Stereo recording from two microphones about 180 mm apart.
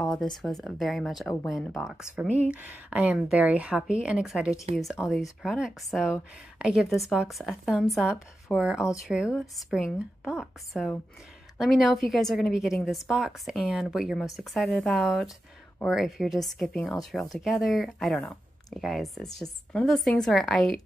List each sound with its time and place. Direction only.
0.1 s speech: centre (ahead or behind)